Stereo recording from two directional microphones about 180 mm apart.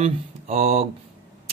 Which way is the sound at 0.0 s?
35° right (ahead or behind).